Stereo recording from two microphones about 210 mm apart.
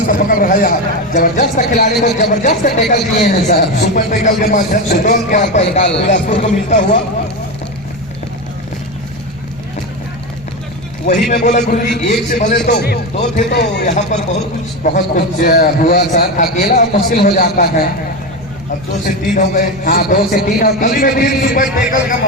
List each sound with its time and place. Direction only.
0.1 s speech: 40° left (ahead or behind)
11.0 s speech: 35° left (ahead or behind)
12.8 s a man's voice: 50° left (ahead or behind)
13.8 s a man's voice: 35° left (ahead or behind)
19.0 s a man's voice: 40° left (ahead or behind)